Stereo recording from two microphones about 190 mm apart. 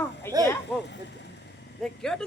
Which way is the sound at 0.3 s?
15° left (ahead or behind).